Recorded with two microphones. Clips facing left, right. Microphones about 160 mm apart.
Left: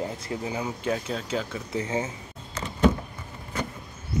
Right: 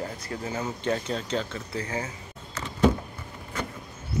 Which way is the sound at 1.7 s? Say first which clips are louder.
Left 5 dB; 20° left (ahead or behind).